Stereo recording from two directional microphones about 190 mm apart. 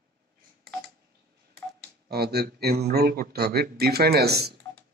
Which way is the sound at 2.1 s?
55° right (ahead or behind).